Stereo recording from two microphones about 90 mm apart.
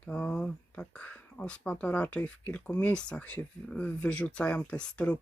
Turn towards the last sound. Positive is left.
turn(degrees=15)  # may be behind; listen again after turning